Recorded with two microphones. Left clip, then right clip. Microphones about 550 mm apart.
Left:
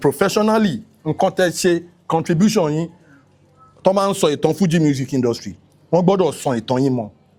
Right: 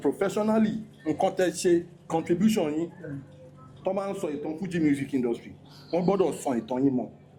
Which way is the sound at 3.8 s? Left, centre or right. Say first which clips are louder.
Left 14 dB; left.